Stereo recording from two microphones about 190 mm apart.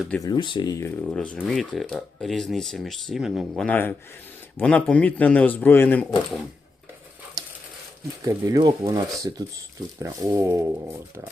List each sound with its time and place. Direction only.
0.2 s speech: 25° left (ahead or behind)
1.0 s speech: 5° left (ahead or behind)
8.2 s speech: 15° right (ahead or behind)